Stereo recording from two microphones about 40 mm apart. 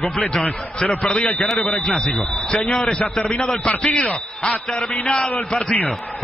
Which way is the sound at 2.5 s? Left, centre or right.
Centre.